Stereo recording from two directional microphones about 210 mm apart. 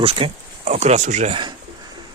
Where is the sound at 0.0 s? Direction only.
25° right (ahead or behind).